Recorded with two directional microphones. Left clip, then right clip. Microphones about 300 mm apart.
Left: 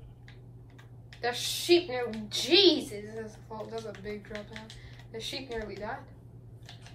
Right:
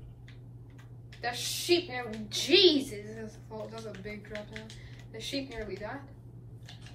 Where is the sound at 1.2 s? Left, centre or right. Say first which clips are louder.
Left 2 dB; centre.